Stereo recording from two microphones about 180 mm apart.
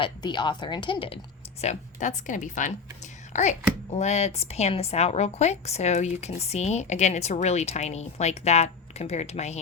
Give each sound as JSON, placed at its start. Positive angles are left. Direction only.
{"t": 0.0, "sound": "speech", "side_deg": 25}
{"t": 1.6, "sound": "a woman's voice", "side_deg": 40}